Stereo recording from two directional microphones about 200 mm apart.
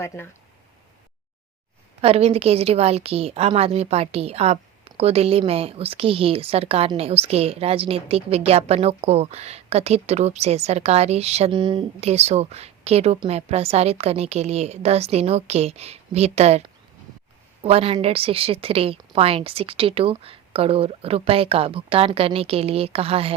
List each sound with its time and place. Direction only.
0.0 s speech: 15° left (ahead or behind)
2.0 s a woman's voice: 30° right (ahead or behind)